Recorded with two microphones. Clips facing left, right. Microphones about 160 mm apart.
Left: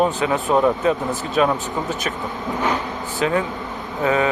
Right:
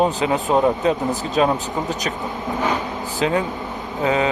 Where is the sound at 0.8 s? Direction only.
30° right (ahead or behind).